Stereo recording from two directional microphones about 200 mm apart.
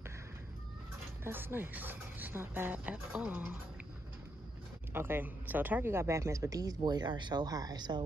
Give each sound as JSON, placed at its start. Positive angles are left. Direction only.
{"t": 1.2, "sound": "speech", "side_deg": -10}
{"t": 4.9, "sound": "speech", "side_deg": -10}